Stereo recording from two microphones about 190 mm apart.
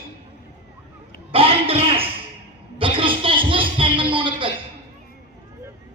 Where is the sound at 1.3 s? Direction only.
30° right (ahead or behind).